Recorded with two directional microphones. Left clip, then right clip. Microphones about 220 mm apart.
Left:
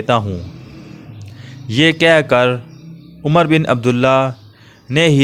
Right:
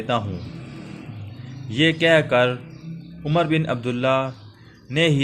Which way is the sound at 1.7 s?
40° left (ahead or behind).